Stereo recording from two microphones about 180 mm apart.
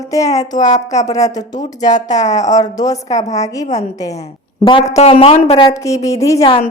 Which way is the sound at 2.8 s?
20° left (ahead or behind).